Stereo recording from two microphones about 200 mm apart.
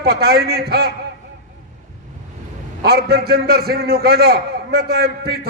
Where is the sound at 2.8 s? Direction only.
55° right (ahead or behind).